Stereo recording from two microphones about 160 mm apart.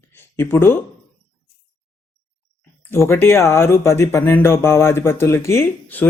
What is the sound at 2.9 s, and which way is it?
Speech, 15° left (ahead or behind).